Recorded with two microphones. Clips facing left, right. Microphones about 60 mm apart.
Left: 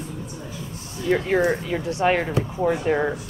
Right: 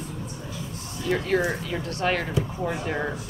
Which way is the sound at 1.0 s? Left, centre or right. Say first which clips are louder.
Left 4 dB; centre.